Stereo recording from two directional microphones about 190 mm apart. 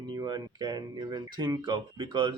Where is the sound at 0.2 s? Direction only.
20° right (ahead or behind).